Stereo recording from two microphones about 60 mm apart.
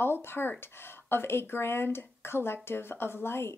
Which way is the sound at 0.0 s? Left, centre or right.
Left.